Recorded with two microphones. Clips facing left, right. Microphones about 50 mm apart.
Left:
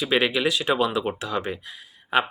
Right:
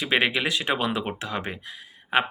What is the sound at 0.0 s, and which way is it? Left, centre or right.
Speech, right.